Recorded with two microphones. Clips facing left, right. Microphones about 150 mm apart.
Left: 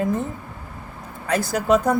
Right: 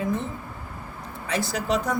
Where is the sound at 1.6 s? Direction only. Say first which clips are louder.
Left 9 dB; 60° left (ahead or behind).